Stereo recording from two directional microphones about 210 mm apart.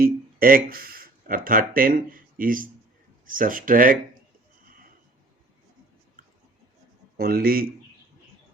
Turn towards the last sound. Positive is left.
turn(degrees=-45)  # may be behind; listen again after turning